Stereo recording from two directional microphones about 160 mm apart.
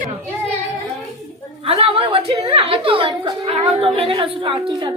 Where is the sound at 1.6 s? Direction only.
40° right (ahead or behind).